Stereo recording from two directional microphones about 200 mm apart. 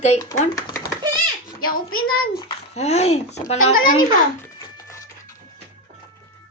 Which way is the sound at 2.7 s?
35° left (ahead or behind).